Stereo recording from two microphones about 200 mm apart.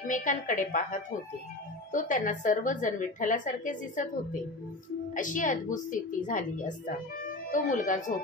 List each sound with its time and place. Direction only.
0.0 s a woman's voice: 40° left (ahead or behind)
1.9 s a woman's voice: 40° left (ahead or behind)